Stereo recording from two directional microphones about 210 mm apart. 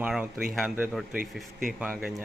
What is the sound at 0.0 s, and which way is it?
Speech, 5° right (ahead or behind).